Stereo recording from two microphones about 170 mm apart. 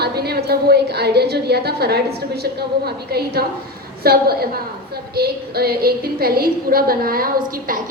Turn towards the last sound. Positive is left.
turn(degrees=-55)  # may be behind; listen again after turning